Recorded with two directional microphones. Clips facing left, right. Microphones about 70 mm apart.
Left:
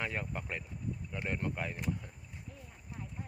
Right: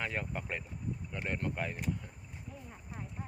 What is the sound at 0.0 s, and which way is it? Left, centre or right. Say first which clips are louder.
Speech: right 1 dB; centre.